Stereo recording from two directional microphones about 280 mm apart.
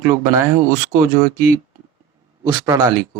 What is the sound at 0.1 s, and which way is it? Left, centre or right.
Speech, centre.